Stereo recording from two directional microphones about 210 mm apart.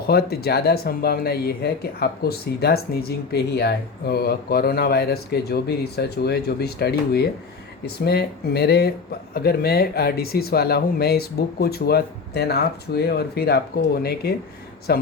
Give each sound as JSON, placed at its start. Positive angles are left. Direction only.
{"t": 0.1, "sound": "speech", "side_deg": 50}